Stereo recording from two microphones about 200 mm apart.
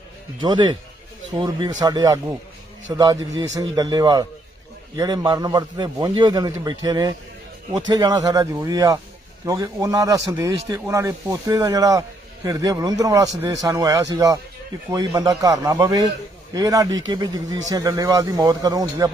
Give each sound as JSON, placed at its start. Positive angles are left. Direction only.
{"t": 0.4, "sound": "a man's voice", "side_deg": -20}